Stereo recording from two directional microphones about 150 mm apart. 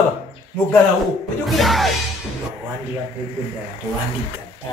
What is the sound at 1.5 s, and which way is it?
Music, centre (ahead or behind).